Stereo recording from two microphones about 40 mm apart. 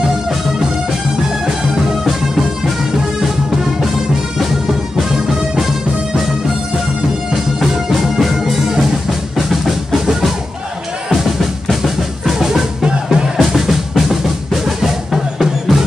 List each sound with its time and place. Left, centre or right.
7.6 s music: centre
11.8 s drum: centre
12.8 s music: centre
14.8 s music: centre